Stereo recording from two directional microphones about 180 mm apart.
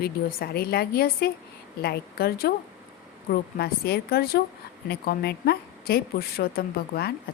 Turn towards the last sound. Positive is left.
turn(degrees=60)  # may be behind; listen again after turning